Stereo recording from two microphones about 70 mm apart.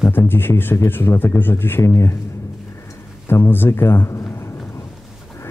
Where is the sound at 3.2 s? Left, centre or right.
Left.